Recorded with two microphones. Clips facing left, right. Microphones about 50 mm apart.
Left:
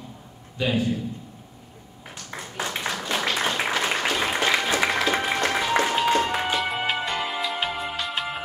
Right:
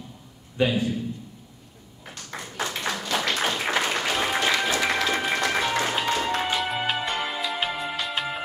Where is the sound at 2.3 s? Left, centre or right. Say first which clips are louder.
Even; centre.